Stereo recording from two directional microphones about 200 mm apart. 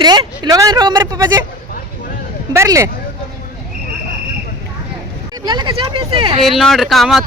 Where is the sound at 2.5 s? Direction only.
15° right (ahead or behind).